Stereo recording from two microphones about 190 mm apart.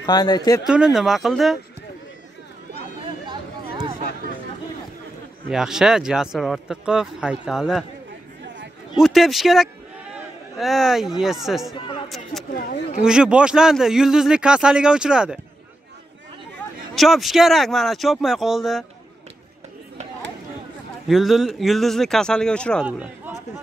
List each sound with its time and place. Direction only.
0.0 s speech: 20° left (ahead or behind)
0.7 s speech: 5° right (ahead or behind)
3.3 s a sound: 25° right (ahead or behind)
5.5 s speech: 5° right (ahead or behind)
8.9 s speech: centre (ahead or behind)
12.5 s speech: 50° left (ahead or behind)
13.0 s speech: 5° right (ahead or behind)
16.9 s speech: centre (ahead or behind)
21.1 s speech: centre (ahead or behind)
22.8 s a man's voice: 10° right (ahead or behind)